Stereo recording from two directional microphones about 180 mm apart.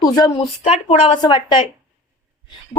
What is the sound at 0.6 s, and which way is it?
A woman's voice, 35° left (ahead or behind).